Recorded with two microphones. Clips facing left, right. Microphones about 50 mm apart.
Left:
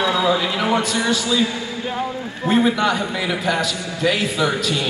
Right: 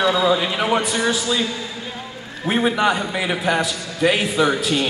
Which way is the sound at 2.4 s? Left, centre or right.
Centre.